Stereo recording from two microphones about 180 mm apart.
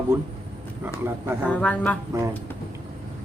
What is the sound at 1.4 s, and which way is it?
Speech, 5° left (ahead or behind).